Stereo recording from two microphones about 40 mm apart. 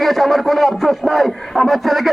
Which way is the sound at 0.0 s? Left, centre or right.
Centre.